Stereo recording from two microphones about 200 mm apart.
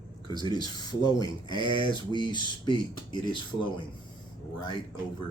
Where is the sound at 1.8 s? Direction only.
20° left (ahead or behind).